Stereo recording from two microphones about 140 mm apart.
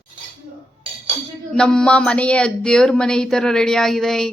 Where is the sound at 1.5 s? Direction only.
5° left (ahead or behind).